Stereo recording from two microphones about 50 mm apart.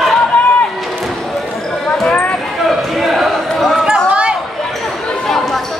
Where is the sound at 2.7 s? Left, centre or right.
Centre.